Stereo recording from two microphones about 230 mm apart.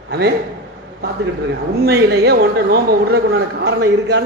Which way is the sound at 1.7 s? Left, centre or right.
Right.